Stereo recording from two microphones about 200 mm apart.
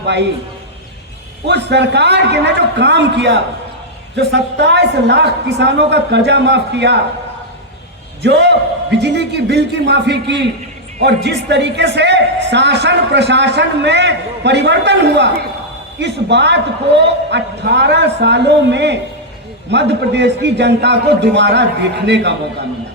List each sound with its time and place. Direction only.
0.0 s a man's voice: 60° right (ahead or behind)
1.5 s a man's voice: 60° right (ahead or behind)
8.2 s a man's voice: 60° right (ahead or behind)